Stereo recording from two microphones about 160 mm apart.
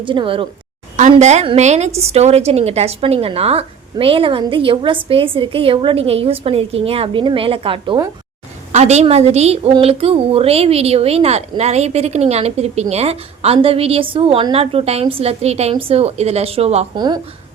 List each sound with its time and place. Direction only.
0.0 s a woman's voice: 30° right (ahead or behind)
0.9 s a woman's voice: 45° right (ahead or behind)
8.7 s a woman's voice: 45° right (ahead or behind)
16.9 s speech: 25° right (ahead or behind)